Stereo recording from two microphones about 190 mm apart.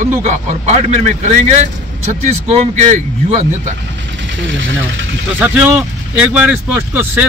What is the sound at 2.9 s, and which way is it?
Speech, 40° right (ahead or behind).